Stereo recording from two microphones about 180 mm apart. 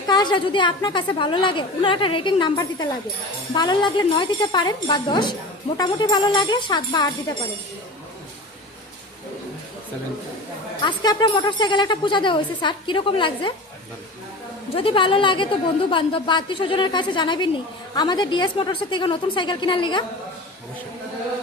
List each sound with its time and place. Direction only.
0.1 s a woman's voice: 25° left (ahead or behind)
10.8 s a woman's voice: 25° left (ahead or behind)
14.8 s a woman's voice: 30° left (ahead or behind)